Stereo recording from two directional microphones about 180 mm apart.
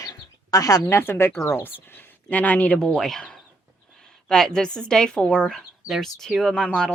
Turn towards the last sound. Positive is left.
turn(degrees=5)  # may be behind; listen again after turning